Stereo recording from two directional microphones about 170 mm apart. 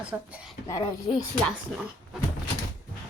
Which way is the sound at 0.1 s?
5° right (ahead or behind).